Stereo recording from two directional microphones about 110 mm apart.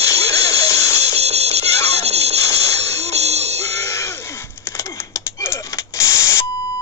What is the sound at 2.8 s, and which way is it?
Music, 75° right (ahead or behind).